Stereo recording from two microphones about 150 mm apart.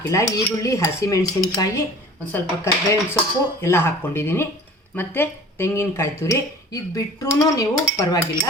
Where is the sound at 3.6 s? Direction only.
15° left (ahead or behind).